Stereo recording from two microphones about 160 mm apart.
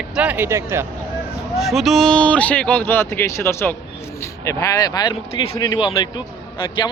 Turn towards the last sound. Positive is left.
turn(degrees=30)  # may be behind; listen again after turning